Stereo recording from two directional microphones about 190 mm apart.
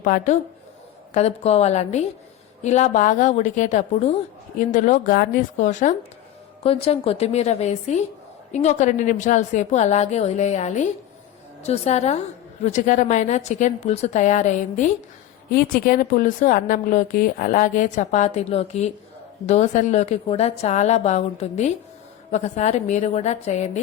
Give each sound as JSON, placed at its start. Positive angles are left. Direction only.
{"t": 0.0, "sound": "a woman's voice", "side_deg": 40}
{"t": 15.4, "sound": "a woman's voice", "side_deg": 50}